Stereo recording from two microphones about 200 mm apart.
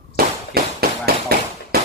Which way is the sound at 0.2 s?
50° right (ahead or behind).